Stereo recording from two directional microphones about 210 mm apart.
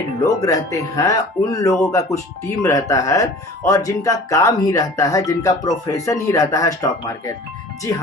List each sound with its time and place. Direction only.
0.4 s speech: 15° left (ahead or behind)